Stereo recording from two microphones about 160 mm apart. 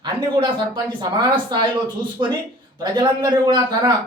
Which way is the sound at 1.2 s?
30° right (ahead or behind).